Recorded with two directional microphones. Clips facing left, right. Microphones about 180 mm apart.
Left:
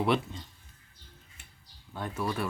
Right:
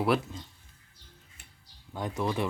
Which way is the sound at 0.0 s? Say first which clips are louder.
Right 1 dB; 5° right (ahead or behind).